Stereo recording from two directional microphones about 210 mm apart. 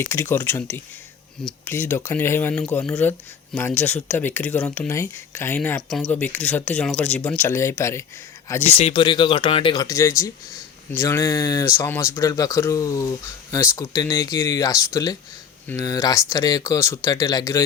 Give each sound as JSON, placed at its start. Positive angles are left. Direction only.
{"t": 0.1, "sound": "speech", "side_deg": 10}
{"t": 8.6, "sound": "speech", "side_deg": 25}